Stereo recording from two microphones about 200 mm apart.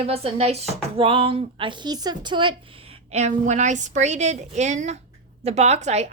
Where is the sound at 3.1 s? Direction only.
35° right (ahead or behind).